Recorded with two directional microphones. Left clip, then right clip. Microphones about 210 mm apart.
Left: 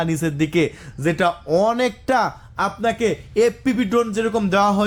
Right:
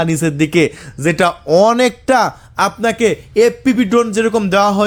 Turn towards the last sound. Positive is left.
turn(degrees=-20)  # may be behind; listen again after turning